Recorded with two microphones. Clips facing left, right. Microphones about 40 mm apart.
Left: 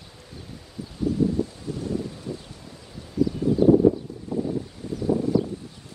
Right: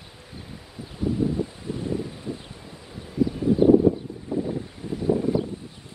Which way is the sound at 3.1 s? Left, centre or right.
Right.